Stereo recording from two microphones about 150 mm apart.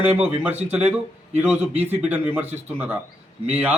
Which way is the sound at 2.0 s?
10° right (ahead or behind).